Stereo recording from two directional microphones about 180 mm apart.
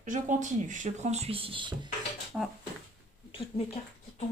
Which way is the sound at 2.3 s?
5° right (ahead or behind).